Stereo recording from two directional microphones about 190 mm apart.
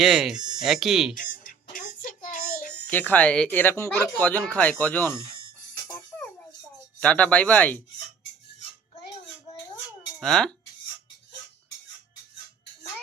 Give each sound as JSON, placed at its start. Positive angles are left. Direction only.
{"t": 0.0, "sound": "speech", "side_deg": 0}
{"t": 1.1, "sound": "music", "side_deg": 45}
{"t": 2.8, "sound": "speech", "side_deg": 10}
{"t": 7.0, "sound": "speech", "side_deg": 5}
{"t": 10.2, "sound": "speech", "side_deg": 5}